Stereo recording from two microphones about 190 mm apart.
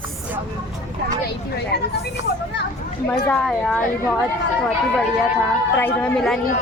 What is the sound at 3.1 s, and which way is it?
Speech, 10° left (ahead or behind).